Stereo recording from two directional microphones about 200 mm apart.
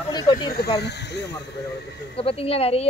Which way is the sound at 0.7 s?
55° left (ahead or behind).